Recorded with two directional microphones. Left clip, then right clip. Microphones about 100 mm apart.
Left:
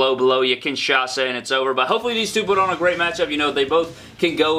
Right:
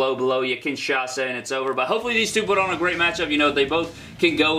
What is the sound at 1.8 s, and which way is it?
Speech, 15° left (ahead or behind).